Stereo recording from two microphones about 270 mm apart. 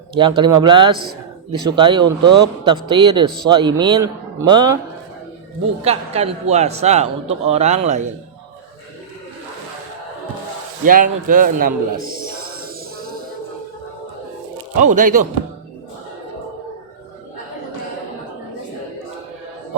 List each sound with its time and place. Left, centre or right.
0.1 s a man's voice: centre
5.8 s a man's voice: right
10.8 s a man's voice: right
14.8 s a man's voice: right